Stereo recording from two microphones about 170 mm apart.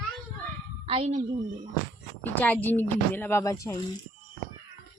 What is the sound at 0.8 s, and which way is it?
Speech, 35° right (ahead or behind).